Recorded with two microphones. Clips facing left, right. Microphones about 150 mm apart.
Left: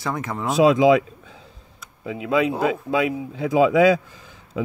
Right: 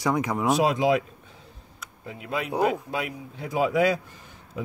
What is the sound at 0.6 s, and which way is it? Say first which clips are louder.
Speech: left 10 dB; 90° left.